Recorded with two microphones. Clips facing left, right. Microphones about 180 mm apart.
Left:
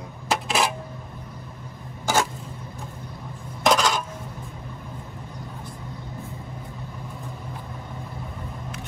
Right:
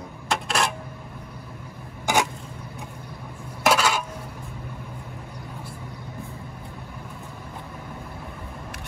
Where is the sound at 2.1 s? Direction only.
15° right (ahead or behind).